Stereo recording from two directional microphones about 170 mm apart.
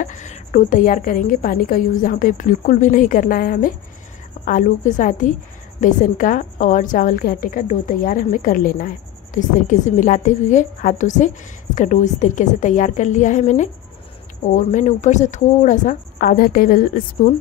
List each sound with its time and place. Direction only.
0.0 s a woman's voice: 45° left (ahead or behind)